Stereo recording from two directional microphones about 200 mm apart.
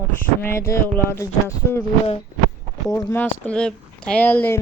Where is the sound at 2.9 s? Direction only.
15° left (ahead or behind).